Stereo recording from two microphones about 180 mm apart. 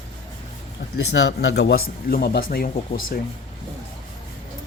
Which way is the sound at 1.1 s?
85° left.